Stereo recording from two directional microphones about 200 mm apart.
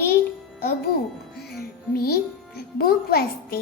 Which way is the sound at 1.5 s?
50° left (ahead or behind).